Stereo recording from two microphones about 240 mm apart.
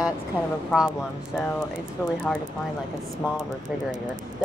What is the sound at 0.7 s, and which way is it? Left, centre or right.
Speech, centre.